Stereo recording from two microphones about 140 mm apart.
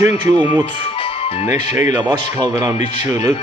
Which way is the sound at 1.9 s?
25° right (ahead or behind).